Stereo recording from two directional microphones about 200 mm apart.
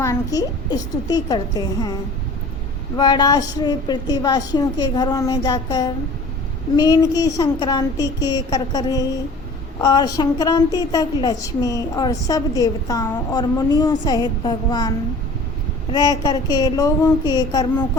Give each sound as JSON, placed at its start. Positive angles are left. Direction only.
{"t": 0.0, "sound": "a woman's voice", "side_deg": 15}
{"t": 3.0, "sound": "a woman's voice", "side_deg": 20}